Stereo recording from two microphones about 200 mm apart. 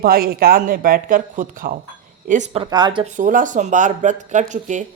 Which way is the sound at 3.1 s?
40° right (ahead or behind).